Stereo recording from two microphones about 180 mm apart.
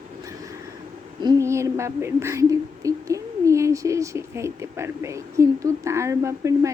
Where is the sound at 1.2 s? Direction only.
20° right (ahead or behind).